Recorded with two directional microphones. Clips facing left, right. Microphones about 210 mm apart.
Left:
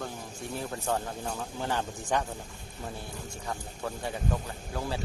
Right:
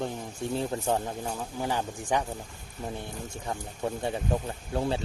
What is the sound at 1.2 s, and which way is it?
Speech, 10° right (ahead or behind).